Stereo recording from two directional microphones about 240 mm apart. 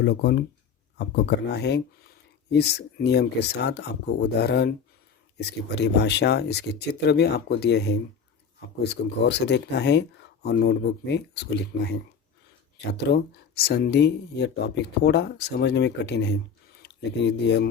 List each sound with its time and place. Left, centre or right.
0.0 s speech: left
13.0 s speech: left